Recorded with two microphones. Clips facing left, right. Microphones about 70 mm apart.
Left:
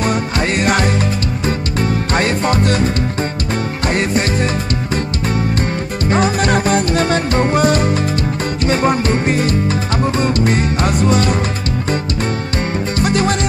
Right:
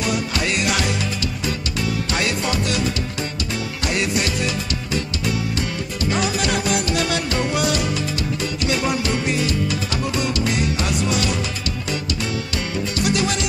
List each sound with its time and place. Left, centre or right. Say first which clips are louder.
0.0 s music: left 5 dB; left
3.9 s music: left 5 dB; left
6.0 s music: left 7 dB; left
13.0 s music: left 5 dB; left